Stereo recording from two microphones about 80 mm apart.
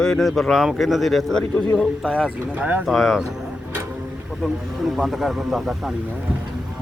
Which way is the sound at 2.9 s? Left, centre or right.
Centre.